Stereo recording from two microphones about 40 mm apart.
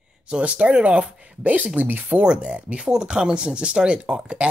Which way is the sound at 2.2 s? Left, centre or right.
Right.